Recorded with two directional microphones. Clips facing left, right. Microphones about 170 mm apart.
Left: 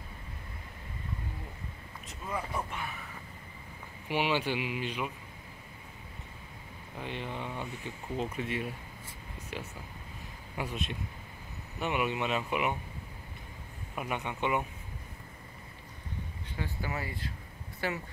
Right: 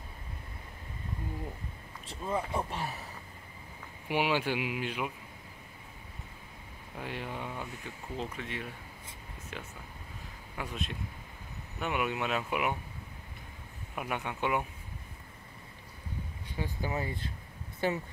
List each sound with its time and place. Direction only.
2.0 s speech: 25° right (ahead or behind)
4.1 s speech: 10° right (ahead or behind)
7.0 s speech: 5° right (ahead or behind)
8.4 s speech: 15° left (ahead or behind)
10.6 s speech: 5° left (ahead or behind)
13.9 s speech: centre (ahead or behind)
16.5 s speech: 15° right (ahead or behind)